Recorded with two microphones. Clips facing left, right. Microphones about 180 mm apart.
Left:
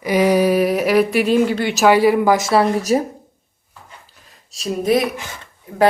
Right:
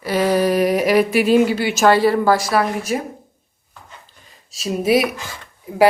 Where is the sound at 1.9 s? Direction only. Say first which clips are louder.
Left 2 dB; 10° left (ahead or behind).